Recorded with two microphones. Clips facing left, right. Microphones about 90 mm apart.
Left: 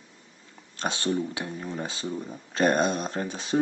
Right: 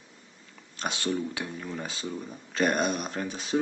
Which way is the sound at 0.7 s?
30° left (ahead or behind).